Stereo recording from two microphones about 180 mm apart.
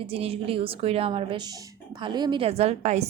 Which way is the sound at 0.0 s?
30° right (ahead or behind).